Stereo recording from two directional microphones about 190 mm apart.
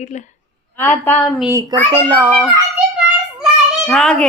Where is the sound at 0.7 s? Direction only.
10° left (ahead or behind).